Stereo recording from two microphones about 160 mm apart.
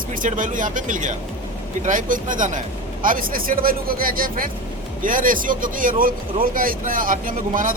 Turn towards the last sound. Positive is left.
turn(degrees=-55)  # may be behind; listen again after turning